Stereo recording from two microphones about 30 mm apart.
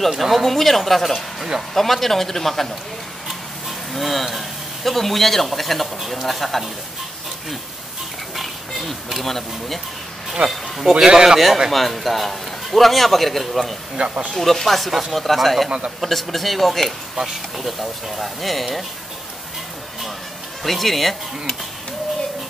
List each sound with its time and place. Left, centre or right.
0.2 s a man's voice: centre
3.3 s a sound: centre
4.4 s a man's voice: centre
8.4 s speech: centre
10.9 s a man's voice: centre
11.7 s a man's voice: centre
13.9 s speech: right
14.3 s a man's voice: centre
20.6 s a man's voice: centre